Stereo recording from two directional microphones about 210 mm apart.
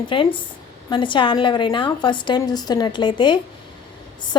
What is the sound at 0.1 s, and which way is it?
A woman's voice, 25° left (ahead or behind).